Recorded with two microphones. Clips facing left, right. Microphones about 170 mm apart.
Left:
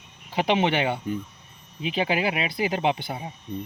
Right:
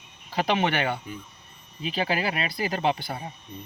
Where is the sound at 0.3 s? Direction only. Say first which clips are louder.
Left 2 dB; 20° left (ahead or behind).